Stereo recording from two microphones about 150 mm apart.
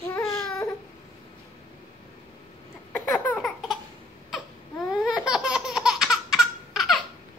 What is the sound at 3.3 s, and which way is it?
Laughter, 5° left (ahead or behind).